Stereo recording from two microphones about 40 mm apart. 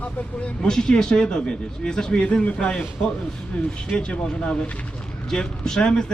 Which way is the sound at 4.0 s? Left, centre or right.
Left.